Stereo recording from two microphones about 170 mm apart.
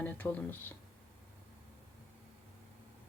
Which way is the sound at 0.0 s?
10° left (ahead or behind).